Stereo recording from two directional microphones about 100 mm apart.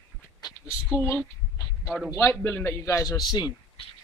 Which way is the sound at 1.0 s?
30° left (ahead or behind).